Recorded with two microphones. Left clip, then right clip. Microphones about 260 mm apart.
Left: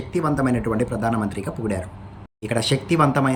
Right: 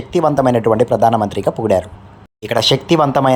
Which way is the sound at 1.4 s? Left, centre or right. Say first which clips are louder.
Right 13 dB; right.